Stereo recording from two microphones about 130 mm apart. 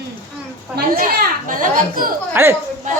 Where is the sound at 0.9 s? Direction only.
90° right.